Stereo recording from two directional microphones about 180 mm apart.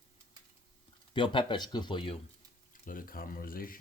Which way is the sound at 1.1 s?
25° left (ahead or behind).